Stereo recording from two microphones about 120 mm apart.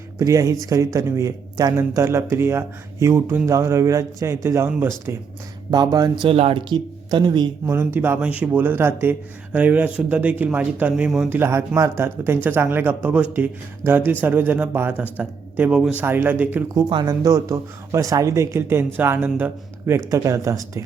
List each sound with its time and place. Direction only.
0.2 s speech: 25° right (ahead or behind)
5.7 s speech: 35° right (ahead or behind)
6.2 s speech: 55° right (ahead or behind)
6.7 s speech: 40° right (ahead or behind)
7.9 s speech: 20° right (ahead or behind)
16.9 s speech: 40° right (ahead or behind)
17.2 s speech: 25° right (ahead or behind)